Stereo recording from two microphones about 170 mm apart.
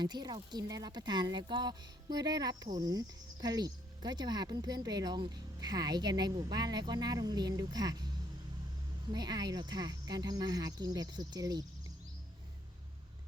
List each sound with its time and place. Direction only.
0.0 s speech: 25° right (ahead or behind)
9.1 s speech: 25° right (ahead or behind)